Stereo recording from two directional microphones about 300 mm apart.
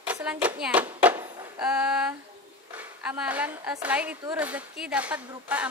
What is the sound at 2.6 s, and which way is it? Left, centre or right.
Speech, centre.